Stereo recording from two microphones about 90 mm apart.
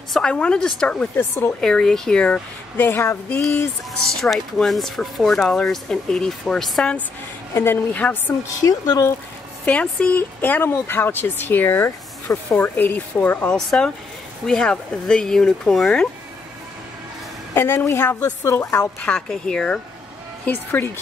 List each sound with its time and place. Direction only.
0.1 s speech: 10° left (ahead or behind); by 3.4 s 30° left (ahead or behind)
4.2 s speech: centre (ahead or behind)
7.5 s speech: 25° left (ahead or behind)
8.6 s speech: 45° left (ahead or behind)
9.7 s speech: 15° left (ahead or behind)
13.5 s speech: 5° left (ahead or behind)
17.6 s speech: 25° left (ahead or behind)
18.8 s speech: 10° left (ahead or behind)
20.4 s speech: 25° left (ahead or behind)